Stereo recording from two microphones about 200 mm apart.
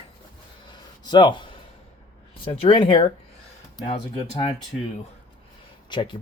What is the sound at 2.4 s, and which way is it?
Speech, 25° left (ahead or behind).